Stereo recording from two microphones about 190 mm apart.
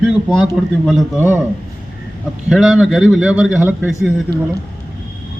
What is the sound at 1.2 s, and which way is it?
Speech, 10° right (ahead or behind).